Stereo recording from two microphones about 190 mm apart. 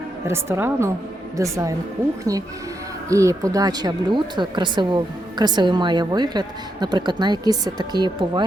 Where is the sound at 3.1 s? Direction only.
15° right (ahead or behind).